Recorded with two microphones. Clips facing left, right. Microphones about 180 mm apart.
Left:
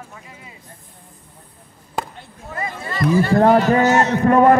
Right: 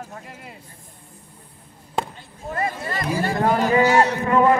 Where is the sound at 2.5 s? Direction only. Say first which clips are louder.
Right 2 dB; 50° right (ahead or behind).